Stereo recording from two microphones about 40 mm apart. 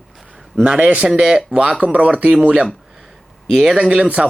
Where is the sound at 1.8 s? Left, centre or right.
Right.